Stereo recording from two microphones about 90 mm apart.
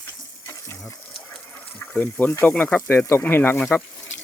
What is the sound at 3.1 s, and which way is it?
Speech, 25° left (ahead or behind).